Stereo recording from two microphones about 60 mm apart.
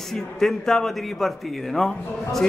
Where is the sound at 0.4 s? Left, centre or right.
Centre.